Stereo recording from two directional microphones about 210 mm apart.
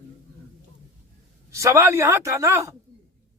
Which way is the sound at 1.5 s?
15° right (ahead or behind).